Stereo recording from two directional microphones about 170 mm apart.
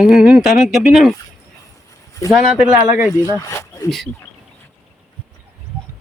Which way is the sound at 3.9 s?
Centre (ahead or behind).